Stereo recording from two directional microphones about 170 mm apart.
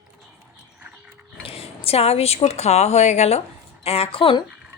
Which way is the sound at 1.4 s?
35° left (ahead or behind).